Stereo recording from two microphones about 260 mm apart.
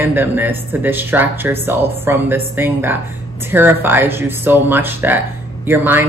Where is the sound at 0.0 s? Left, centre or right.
Centre.